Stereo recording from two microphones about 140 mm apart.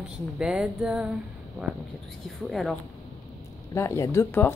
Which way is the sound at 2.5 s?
Centre (ahead or behind).